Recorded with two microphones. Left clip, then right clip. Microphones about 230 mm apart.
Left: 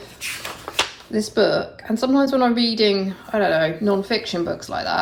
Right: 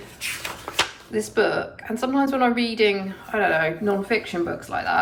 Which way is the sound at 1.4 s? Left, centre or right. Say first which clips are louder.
Left 3 dB; centre.